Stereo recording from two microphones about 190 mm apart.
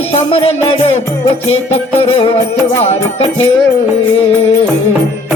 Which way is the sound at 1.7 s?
30° left (ahead or behind).